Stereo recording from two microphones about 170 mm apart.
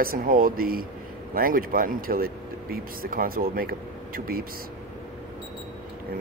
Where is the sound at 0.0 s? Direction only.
60° right (ahead or behind).